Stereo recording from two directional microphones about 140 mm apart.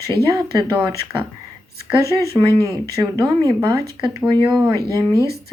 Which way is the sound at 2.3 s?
20° left (ahead or behind).